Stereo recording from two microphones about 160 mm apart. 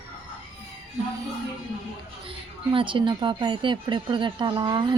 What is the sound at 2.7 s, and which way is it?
A woman's voice, 30° right (ahead or behind).